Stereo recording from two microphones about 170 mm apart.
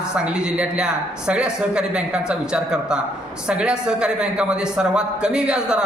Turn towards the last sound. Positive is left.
turn(degrees=-5)  # may be behind; listen again after turning